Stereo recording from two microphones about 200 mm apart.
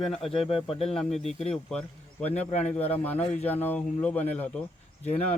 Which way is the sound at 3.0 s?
10° left (ahead or behind).